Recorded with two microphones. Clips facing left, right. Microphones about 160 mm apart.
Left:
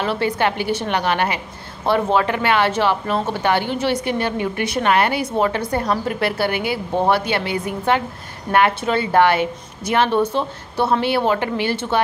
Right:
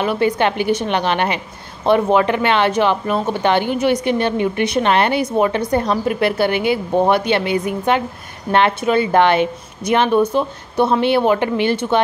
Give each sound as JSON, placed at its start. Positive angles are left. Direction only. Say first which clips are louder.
{"t": 0.0, "sound": "speech", "louder": "right 3 dB", "side_deg": -20}